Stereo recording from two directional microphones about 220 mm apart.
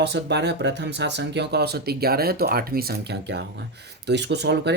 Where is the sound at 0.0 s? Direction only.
50° right (ahead or behind).